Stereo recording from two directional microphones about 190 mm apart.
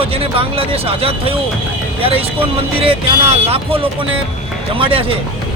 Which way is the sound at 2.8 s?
30° right (ahead or behind).